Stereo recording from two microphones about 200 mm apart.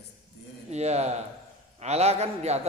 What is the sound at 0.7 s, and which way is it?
A man's voice, 35° right (ahead or behind).